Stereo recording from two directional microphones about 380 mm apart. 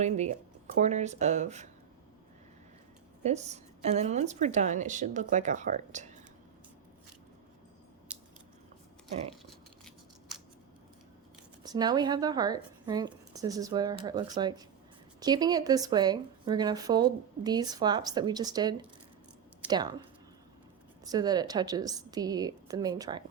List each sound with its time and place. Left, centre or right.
0.0 s speech: centre
3.2 s speech: centre
8.1 s biting: centre
11.6 s a woman's voice: centre
21.0 s speech: centre